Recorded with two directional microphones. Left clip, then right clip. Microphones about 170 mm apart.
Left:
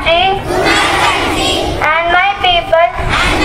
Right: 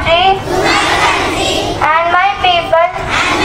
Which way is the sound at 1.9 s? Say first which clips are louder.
Even; 30° left (ahead or behind).